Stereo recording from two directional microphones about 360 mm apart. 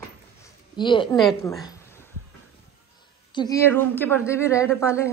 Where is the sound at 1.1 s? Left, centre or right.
Centre.